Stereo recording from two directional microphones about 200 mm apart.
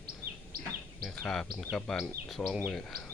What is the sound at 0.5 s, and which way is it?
Bird, 50° right (ahead or behind).